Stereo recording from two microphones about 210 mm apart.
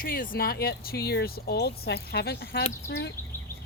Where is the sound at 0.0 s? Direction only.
40° left (ahead or behind).